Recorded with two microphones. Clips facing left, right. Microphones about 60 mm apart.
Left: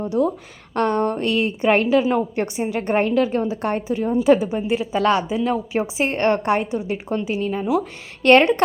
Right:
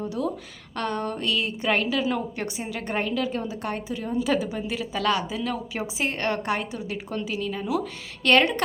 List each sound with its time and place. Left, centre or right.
0.2 s a woman's voice: left